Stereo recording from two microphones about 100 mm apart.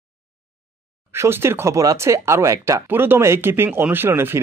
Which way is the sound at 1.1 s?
25° right (ahead or behind).